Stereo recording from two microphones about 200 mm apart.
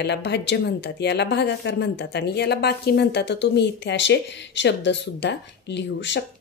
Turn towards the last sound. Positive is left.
turn(degrees=60)  # may be behind; listen again after turning